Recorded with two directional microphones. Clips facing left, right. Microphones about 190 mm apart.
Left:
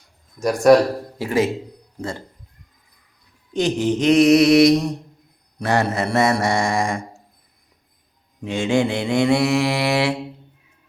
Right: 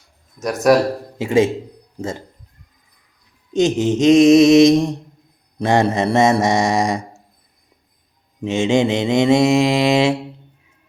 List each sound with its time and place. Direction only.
0.7 s speech: centre (ahead or behind)
1.2 s mantra: 25° right (ahead or behind)
3.5 s mantra: 20° right (ahead or behind)
8.4 s mantra: 25° right (ahead or behind)